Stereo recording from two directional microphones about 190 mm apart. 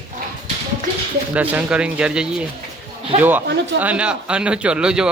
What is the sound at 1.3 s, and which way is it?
A man's voice, 5° right (ahead or behind).